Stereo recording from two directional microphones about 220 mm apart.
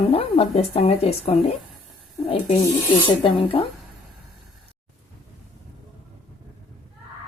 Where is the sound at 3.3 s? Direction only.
25° left (ahead or behind).